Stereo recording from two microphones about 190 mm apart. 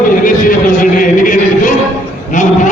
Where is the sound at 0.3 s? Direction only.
45° left (ahead or behind).